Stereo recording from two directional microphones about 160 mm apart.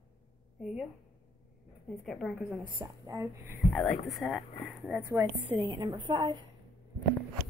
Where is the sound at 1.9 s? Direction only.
Centre (ahead or behind).